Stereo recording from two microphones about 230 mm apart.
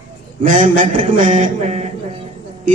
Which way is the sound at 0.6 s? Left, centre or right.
Right.